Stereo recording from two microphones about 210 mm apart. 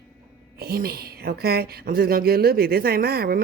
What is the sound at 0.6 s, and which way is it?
A woman's voice, 45° right (ahead or behind).